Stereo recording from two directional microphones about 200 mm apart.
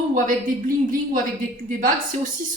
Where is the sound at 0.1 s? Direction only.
45° right (ahead or behind).